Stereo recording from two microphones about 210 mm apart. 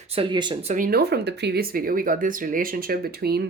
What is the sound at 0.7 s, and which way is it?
Speech, 45° right (ahead or behind).